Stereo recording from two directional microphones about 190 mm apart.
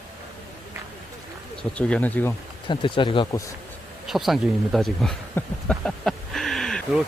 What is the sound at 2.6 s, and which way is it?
Speech, 25° left (ahead or behind).